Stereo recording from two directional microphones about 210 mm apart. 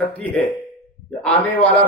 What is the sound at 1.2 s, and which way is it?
Speech, 5° left (ahead or behind).